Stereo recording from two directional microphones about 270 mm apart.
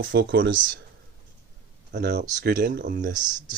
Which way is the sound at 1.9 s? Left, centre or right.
Right.